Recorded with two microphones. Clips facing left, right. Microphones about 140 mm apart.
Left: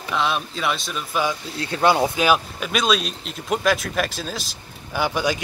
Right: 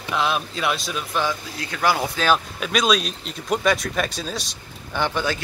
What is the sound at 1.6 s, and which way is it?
Speech, 25° left (ahead or behind).